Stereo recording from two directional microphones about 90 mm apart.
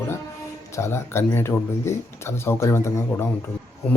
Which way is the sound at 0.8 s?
30° left (ahead or behind).